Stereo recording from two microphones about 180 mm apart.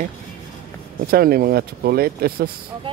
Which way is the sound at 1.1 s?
55° right (ahead or behind).